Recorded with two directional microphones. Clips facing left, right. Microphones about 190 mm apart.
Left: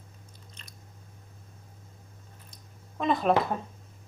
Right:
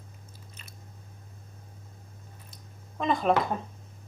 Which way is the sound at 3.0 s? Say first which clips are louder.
Even; centre (ahead or behind).